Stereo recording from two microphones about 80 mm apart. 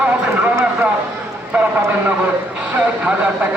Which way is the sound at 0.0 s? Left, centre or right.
Centre.